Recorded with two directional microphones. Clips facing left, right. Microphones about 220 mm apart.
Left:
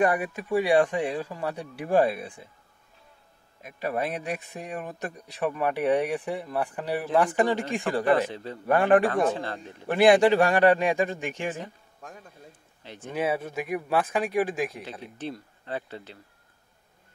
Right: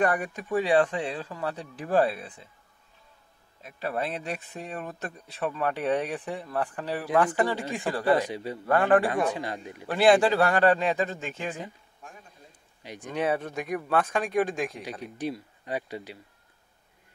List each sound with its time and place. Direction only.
0.0 s speech: 10° left (ahead or behind)
3.6 s speech: 15° left (ahead or behind)
8.1 s speech: 15° right (ahead or behind)
8.6 s speech: 20° left (ahead or behind)
9.0 s speech: 15° right (ahead or behind)
9.9 s speech: 15° left (ahead or behind)
12.8 s speech: 15° right (ahead or behind)
13.1 s speech: 5° left (ahead or behind)
14.8 s speech: 10° right (ahead or behind)